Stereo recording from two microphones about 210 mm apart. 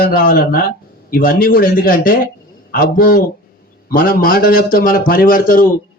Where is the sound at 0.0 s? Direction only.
45° left (ahead or behind).